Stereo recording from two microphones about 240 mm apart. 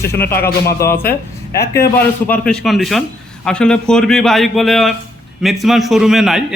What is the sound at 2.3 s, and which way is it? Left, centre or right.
Speech, centre.